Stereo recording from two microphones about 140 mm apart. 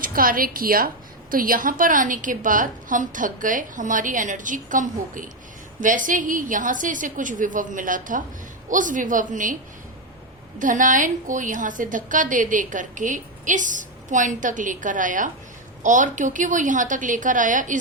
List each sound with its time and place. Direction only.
0.0 s a woman's voice: 90° right; by 9.6 s 70° right (ahead or behind)
10.6 s a woman's voice: 70° right (ahead or behind)